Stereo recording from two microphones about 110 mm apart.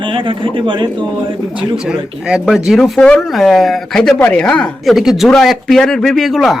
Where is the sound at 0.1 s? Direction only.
50° right (ahead or behind).